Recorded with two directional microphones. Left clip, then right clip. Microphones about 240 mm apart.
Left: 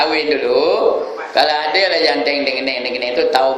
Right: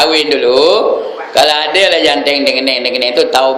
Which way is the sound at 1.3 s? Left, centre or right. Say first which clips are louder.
Right 5 dB; right.